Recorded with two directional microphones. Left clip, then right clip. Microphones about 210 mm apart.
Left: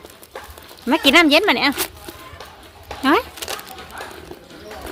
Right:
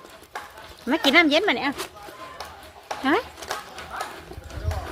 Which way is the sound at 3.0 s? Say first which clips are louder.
Left 6 dB; 20° left (ahead or behind).